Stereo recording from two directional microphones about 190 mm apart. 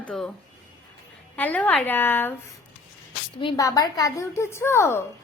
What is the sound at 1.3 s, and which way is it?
A woman's voice, 10° left (ahead or behind).